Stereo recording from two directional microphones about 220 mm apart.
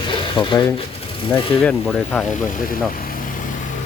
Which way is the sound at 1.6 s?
5° left (ahead or behind).